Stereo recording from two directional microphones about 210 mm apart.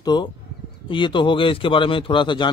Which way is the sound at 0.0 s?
20° left (ahead or behind).